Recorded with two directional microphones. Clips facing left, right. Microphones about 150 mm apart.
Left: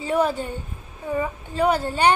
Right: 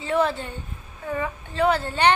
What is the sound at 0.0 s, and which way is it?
A woman's voice, 10° left (ahead or behind).